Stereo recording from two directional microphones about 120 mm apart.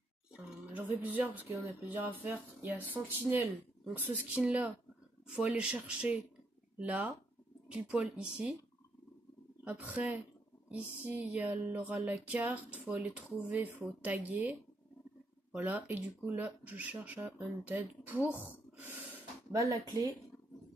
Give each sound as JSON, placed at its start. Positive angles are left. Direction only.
{"t": 0.3, "sound": "speech", "side_deg": -15}
{"t": 4.4, "sound": "music", "side_deg": -10}
{"t": 9.7, "sound": "music", "side_deg": -10}
{"t": 18.8, "sound": "snort", "side_deg": -15}
{"t": 19.5, "sound": "speech", "side_deg": -30}